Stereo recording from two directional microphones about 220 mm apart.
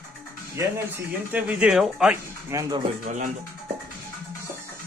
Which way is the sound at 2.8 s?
35° right (ahead or behind).